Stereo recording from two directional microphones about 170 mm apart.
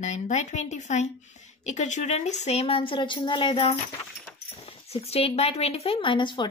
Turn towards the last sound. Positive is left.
turn(degrees=30)  # may be behind; listen again after turning